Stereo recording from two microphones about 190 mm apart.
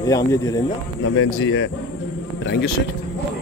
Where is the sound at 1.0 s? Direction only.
90° left.